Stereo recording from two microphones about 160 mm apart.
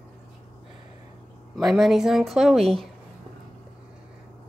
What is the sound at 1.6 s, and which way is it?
Speech, centre (ahead or behind).